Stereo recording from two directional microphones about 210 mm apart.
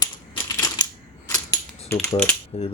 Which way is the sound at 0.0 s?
15° left (ahead or behind).